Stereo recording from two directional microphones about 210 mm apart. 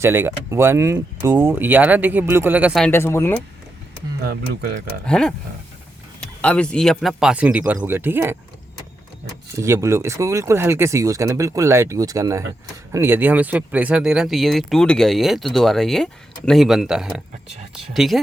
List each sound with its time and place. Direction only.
0.0 s speech: 10° right (ahead or behind)
2.8 s speech: 10° left (ahead or behind)
4.2 s speech: 45° right (ahead or behind)
5.0 s speech: 5° left (ahead or behind)
9.6 s speech: 15° right (ahead or behind)